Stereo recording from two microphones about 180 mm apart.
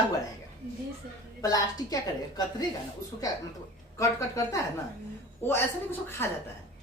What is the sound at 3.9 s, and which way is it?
A woman's voice, 20° left (ahead or behind).